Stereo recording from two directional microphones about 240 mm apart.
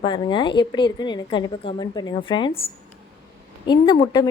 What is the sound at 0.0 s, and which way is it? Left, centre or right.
A woman's voice, centre.